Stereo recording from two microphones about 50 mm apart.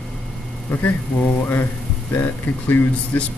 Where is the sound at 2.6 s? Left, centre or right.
Left.